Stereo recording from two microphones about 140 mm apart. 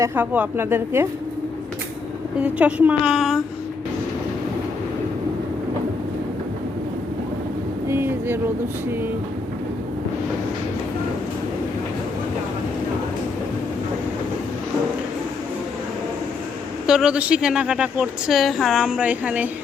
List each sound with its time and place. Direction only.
0.0 s speech: 15° right (ahead or behind)
2.4 s speech: 10° right (ahead or behind)
7.9 s a sound: 15° right (ahead or behind)
16.8 s speech: 5° right (ahead or behind)